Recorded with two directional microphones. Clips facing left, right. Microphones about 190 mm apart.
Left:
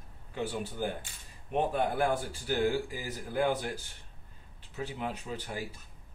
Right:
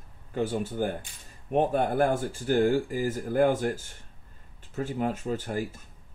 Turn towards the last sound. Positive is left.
turn(degrees=-45)  # may be behind; listen again after turning